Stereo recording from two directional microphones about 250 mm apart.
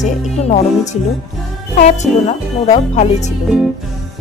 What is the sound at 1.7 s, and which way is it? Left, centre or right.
Music, left.